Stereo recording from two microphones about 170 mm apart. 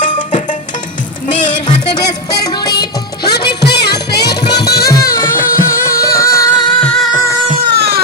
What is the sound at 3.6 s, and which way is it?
Music, 75° left (ahead or behind).